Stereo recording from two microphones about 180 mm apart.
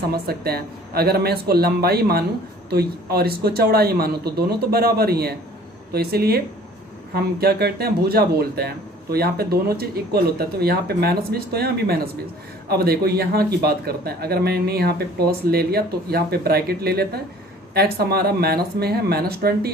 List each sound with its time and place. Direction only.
0.1 s speech: 60° right (ahead or behind)